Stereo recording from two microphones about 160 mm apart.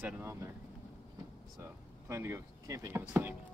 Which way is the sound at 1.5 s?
15° right (ahead or behind).